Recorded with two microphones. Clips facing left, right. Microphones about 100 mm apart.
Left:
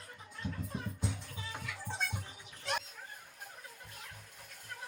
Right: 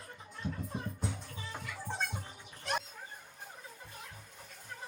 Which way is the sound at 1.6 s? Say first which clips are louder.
Right 1 dB; 10° right (ahead or behind).